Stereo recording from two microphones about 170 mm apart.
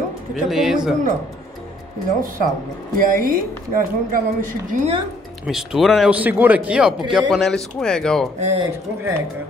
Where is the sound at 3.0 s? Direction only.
55° right (ahead or behind).